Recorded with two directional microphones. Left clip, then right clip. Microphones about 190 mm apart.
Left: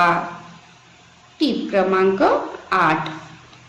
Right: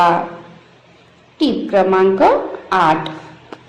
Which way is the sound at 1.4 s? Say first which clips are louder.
Right 5 dB; 20° right (ahead or behind).